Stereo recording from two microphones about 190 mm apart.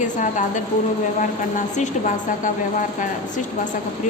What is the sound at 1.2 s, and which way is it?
Speech, 40° left (ahead or behind).